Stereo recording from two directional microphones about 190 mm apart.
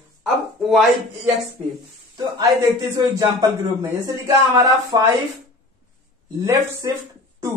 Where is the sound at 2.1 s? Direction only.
20° right (ahead or behind).